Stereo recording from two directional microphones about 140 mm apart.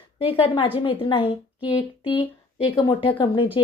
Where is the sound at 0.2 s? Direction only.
45° left (ahead or behind).